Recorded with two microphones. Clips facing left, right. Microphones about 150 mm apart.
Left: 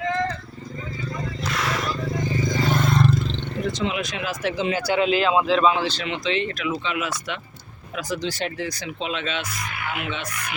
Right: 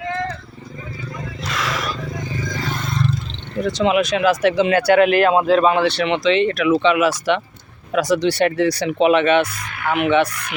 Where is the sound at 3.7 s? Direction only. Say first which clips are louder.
Right 11 dB; 85° right.